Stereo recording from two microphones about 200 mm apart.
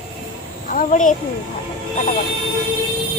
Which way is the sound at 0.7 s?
40° left (ahead or behind).